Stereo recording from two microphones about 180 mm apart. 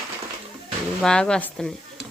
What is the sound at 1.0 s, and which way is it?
Speech, 5° left (ahead or behind).